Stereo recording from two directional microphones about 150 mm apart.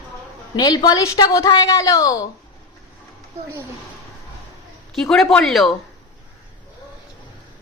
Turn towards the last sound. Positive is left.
turn(degrees=0)  # may be behind; listen again after turning